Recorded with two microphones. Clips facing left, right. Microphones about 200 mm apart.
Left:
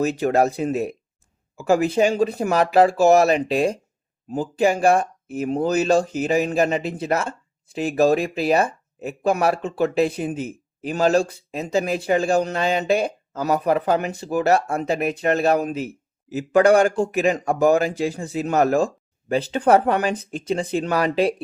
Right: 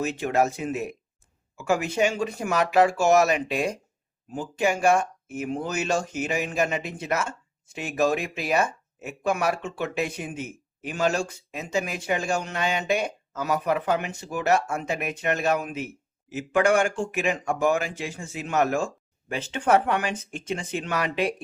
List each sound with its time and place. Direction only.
0.0 s speech: 40° left (ahead or behind)